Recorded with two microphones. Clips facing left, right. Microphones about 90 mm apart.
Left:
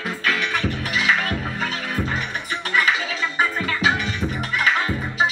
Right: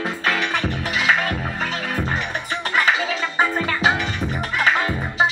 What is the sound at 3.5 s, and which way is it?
Music, 35° right (ahead or behind).